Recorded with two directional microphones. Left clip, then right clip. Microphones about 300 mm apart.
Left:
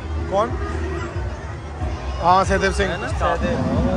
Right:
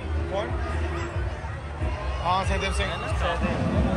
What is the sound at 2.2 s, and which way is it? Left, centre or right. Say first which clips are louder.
Speech: left 10 dB; left.